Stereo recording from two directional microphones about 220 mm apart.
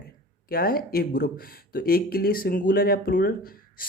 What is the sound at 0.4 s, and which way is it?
Speech, 40° left (ahead or behind).